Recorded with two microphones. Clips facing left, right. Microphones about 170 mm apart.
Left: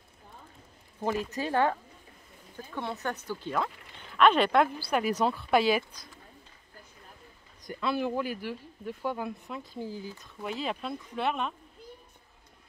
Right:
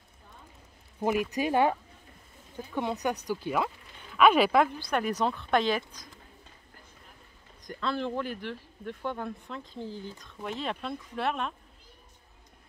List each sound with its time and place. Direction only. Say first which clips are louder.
1.0 s speech: right 3 dB; 15° right (ahead or behind)
4.7 s speech: left 1 dB; 5° left (ahead or behind)
7.6 s speech: left 2 dB; 10° left (ahead or behind)